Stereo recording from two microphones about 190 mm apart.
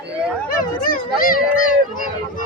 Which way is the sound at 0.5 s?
45° left (ahead or behind).